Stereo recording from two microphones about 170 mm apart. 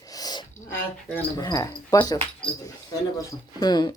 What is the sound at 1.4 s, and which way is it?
Speech, 20° left (ahead or behind).